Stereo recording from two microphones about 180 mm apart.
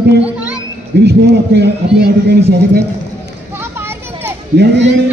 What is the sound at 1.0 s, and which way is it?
A man's voice, 70° right (ahead or behind).